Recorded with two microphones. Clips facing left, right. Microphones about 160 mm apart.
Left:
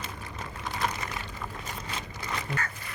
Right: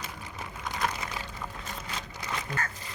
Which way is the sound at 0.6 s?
5° right (ahead or behind).